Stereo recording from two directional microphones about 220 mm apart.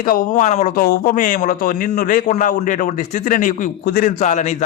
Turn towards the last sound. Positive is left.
turn(degrees=35)  # may be behind; listen again after turning